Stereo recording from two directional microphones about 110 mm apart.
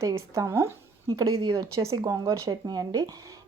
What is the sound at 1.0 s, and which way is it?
Speech, 40° right (ahead or behind).